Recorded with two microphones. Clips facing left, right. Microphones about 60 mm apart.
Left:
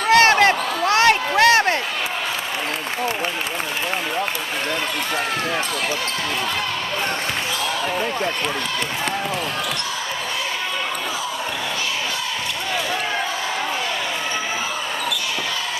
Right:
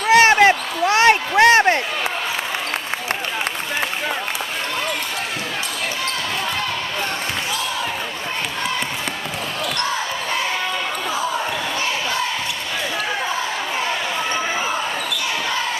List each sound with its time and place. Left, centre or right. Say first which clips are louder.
0.0 s basketball bounce: right 2 dB; centre